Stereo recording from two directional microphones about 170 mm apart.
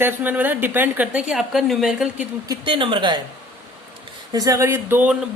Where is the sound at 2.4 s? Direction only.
25° right (ahead or behind).